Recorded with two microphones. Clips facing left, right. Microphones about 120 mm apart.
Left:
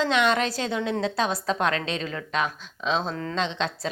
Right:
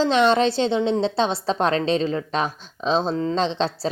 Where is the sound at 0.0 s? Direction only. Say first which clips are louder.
Right 5 dB; 30° right (ahead or behind).